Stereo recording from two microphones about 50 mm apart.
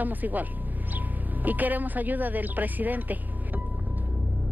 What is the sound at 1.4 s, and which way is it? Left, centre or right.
Speech, right.